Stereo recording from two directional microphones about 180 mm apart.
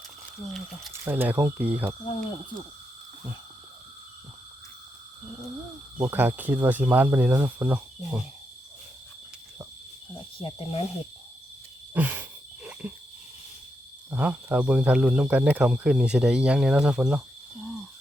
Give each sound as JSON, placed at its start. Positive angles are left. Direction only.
{"t": 0.4, "sound": "speech", "side_deg": 0}
{"t": 1.0, "sound": "speech", "side_deg": -10}
{"t": 6.0, "sound": "speech", "side_deg": -10}
{"t": 10.3, "sound": "speech", "side_deg": 30}
{"t": 11.9, "sound": "frog", "side_deg": -10}
{"t": 14.1, "sound": "speech", "side_deg": -10}